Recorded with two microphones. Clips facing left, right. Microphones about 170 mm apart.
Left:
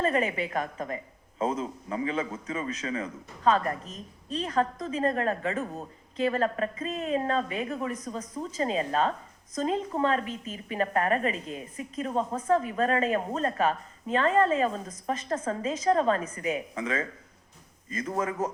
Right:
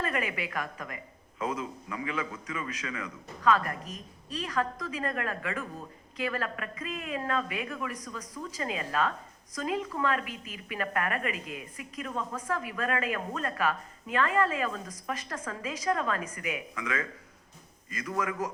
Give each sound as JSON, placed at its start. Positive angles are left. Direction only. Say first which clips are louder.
{"t": 0.0, "sound": "a woman's voice", "louder": "left 6 dB", "side_deg": 25}